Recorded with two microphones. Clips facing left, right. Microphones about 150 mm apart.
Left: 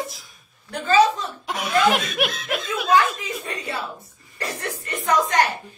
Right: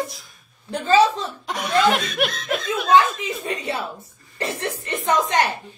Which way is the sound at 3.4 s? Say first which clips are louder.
Right 7 dB; 25° right (ahead or behind).